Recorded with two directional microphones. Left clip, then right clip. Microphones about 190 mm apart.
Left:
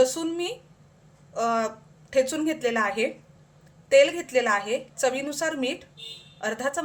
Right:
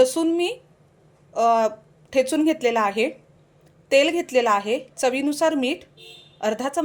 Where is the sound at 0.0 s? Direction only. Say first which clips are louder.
Right 5 dB; 25° right (ahead or behind).